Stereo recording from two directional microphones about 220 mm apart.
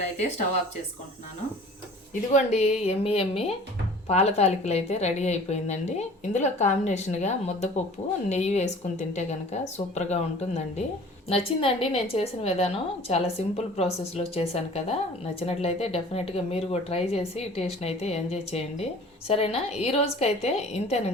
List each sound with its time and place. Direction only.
2.3 s a woman's voice: 30° left (ahead or behind)